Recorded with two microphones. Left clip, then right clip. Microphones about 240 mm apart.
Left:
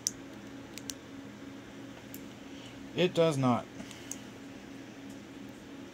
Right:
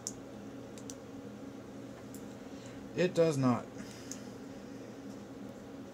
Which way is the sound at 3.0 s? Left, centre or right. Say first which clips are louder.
Left 2 dB; left.